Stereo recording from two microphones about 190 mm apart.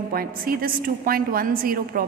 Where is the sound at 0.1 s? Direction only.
50° right (ahead or behind).